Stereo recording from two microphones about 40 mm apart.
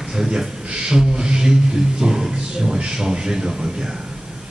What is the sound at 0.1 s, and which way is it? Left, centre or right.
A man's voice, centre.